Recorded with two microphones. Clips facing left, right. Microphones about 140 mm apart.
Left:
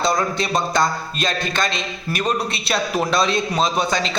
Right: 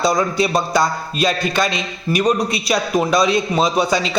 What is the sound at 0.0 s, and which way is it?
A man's voice, 5° right (ahead or behind).